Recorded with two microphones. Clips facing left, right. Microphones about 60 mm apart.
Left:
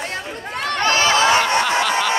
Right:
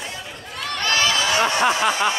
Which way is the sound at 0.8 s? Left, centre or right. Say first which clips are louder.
Left 5 dB; left.